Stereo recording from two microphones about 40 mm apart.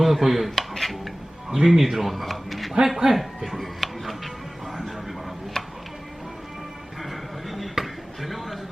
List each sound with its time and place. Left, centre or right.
0.0 s speech: centre
0.7 s a sound: centre
1.5 s speech: centre
2.8 s music: centre
5.6 s chopping: centre
7.0 s a sound: centre